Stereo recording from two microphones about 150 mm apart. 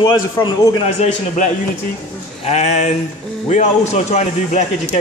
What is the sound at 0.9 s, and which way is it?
Speech, 50° left (ahead or behind).